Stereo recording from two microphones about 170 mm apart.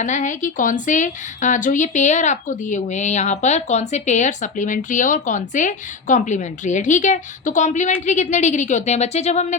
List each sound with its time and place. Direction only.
0.0 s a woman's voice: 45° left (ahead or behind)